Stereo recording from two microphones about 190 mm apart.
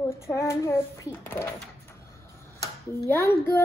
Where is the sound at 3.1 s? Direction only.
15° left (ahead or behind).